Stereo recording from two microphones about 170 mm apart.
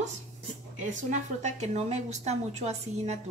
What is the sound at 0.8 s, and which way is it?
Speech, 45° right (ahead or behind).